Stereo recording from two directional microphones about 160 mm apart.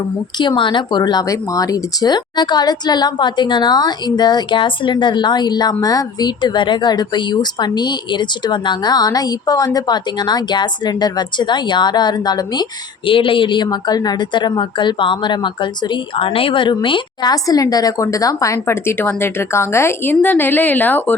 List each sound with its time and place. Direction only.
0.3 s speech: 30° left (ahead or behind); by 21.2 s 10° left (ahead or behind)